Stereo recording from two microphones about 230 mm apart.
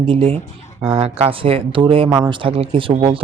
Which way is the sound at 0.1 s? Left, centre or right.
Right.